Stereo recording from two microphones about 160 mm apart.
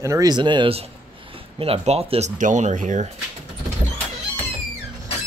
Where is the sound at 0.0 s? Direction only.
20° right (ahead or behind); by 3.1 s 50° right (ahead or behind).